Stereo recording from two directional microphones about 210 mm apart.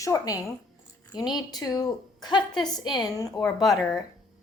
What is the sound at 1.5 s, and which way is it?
A woman's voice, 15° left (ahead or behind).